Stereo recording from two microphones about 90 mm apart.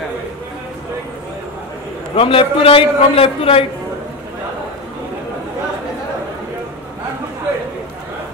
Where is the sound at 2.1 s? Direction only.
90° left.